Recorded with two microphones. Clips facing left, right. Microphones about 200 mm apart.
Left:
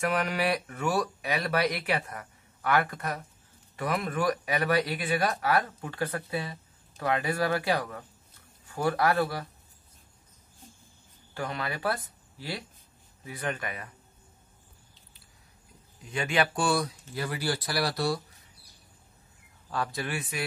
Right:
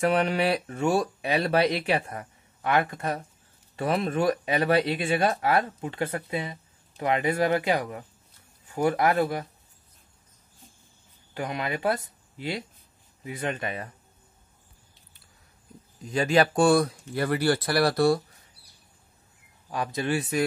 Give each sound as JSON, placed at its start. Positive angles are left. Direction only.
{"t": 0.0, "sound": "speech", "side_deg": -30}
{"t": 11.3, "sound": "speech", "side_deg": -20}
{"t": 16.1, "sound": "speech", "side_deg": -35}
{"t": 19.7, "sound": "speech", "side_deg": -20}